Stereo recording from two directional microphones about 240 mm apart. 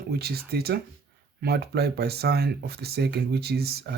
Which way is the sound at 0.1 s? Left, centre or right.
Right.